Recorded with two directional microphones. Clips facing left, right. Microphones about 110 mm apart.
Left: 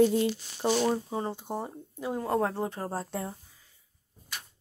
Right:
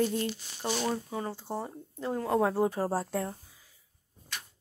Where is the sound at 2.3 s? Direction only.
10° right (ahead or behind).